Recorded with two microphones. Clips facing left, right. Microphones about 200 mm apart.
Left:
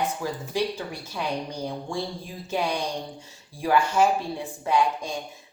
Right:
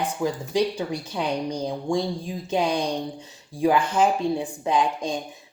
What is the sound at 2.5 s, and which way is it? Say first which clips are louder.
Speech: right 4 dB; 15° right (ahead or behind).